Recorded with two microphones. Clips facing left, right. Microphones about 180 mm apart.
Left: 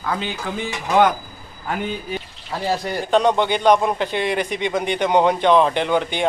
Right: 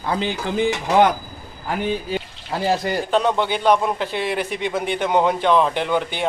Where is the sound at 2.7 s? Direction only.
10° right (ahead or behind).